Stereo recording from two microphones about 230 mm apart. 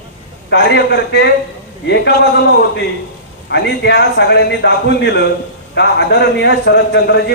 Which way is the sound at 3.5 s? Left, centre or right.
Left.